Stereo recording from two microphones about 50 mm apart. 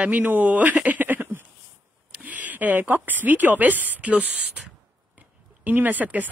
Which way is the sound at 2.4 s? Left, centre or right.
Right.